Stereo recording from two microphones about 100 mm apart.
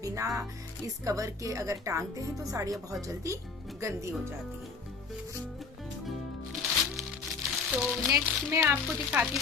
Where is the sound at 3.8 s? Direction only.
30° right (ahead or behind).